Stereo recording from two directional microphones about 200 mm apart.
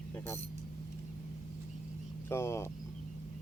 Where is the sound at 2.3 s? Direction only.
15° left (ahead or behind).